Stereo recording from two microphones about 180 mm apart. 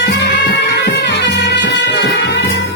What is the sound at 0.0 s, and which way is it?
Music, 80° left.